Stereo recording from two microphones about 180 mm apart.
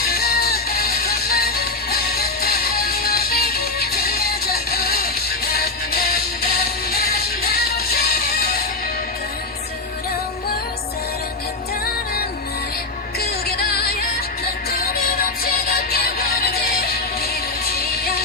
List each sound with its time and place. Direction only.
0.0 s music: 60° left (ahead or behind)
13.1 s music: 60° left (ahead or behind)